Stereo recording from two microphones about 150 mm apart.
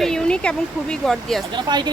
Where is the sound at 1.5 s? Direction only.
30° right (ahead or behind).